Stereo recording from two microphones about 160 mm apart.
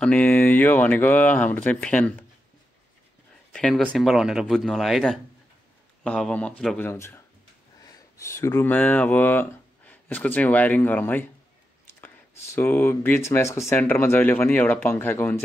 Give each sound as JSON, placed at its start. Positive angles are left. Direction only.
{"t": 0.0, "sound": "speech", "side_deg": 10}
{"t": 3.5, "sound": "speech", "side_deg": 5}
{"t": 6.8, "sound": "speech", "side_deg": 15}
{"t": 7.8, "sound": "a sound", "side_deg": 20}
{"t": 8.7, "sound": "speech", "side_deg": 10}
{"t": 11.8, "sound": "whispering", "side_deg": 15}
{"t": 12.5, "sound": "speech", "side_deg": 15}